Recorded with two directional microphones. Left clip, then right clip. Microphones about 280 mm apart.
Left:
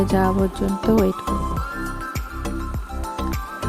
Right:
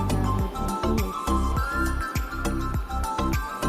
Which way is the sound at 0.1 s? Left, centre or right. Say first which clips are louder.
Left 11 dB; left.